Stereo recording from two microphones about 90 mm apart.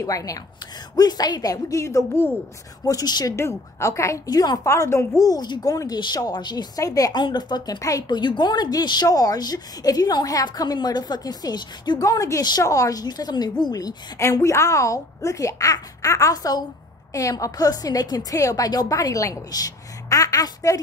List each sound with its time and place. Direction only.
0.0 s a woman's voice: 40° left (ahead or behind)
3.3 s a woman's voice: 30° left (ahead or behind); by 12.0 s 55° left (ahead or behind)
12.0 s a woman's voice: 40° left (ahead or behind)